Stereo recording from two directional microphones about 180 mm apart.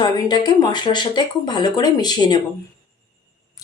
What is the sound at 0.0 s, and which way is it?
A woman's voice, 25° left (ahead or behind).